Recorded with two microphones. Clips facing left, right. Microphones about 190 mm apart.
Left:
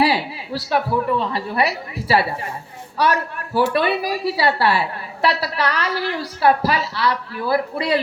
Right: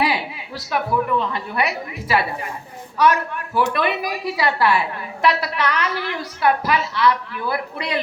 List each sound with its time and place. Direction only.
0.0 s a woman's voice: 35° left (ahead or behind)